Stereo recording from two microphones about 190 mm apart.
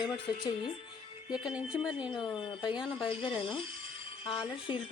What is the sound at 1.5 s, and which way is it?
Speech, 5° right (ahead or behind).